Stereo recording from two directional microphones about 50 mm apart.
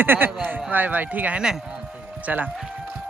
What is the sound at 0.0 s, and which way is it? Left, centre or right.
Speech, right.